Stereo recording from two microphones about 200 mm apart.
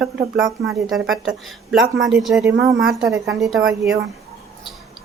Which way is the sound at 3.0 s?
15° right (ahead or behind).